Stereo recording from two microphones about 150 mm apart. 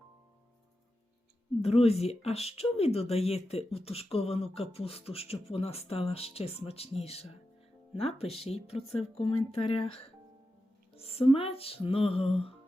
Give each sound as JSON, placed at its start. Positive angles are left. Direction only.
{"t": 1.6, "sound": "speech", "side_deg": 45}